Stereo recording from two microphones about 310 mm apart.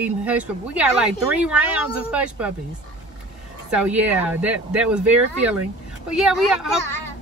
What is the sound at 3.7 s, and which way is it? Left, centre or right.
Speech, centre.